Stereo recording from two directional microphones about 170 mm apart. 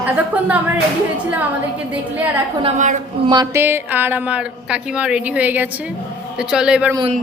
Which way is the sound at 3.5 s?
15° right (ahead or behind).